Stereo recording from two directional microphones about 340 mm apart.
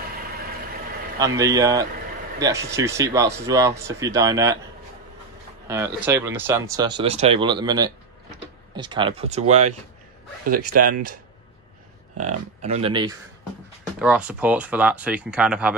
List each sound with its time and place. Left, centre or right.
1.2 s speech: centre
5.7 s speech: centre
10.8 s speech: right
12.2 s speech: centre